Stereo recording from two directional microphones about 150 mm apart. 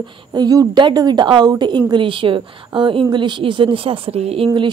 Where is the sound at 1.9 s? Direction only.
35° right (ahead or behind).